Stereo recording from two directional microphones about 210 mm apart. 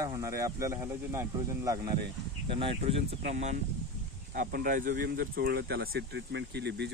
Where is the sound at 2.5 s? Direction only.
25° right (ahead or behind); by 6.8 s 55° right (ahead or behind).